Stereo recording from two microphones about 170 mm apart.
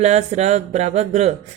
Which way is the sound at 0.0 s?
40° right (ahead or behind).